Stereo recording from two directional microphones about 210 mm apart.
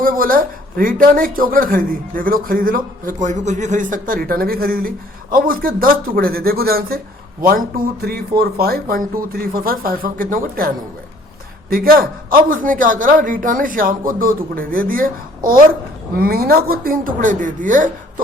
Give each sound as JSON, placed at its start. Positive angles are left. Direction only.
{"t": 0.0, "sound": "a man's voice", "side_deg": -40}
{"t": 11.7, "sound": "a man's voice", "side_deg": -45}